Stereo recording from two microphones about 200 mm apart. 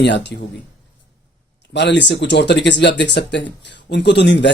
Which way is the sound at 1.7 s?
60° left (ahead or behind).